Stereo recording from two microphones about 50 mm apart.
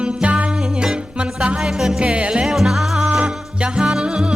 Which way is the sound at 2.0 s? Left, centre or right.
Right.